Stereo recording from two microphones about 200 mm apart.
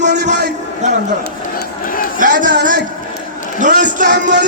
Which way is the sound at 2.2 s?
45° right (ahead or behind).